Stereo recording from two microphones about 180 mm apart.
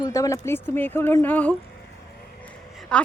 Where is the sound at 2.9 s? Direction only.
5° left (ahead or behind).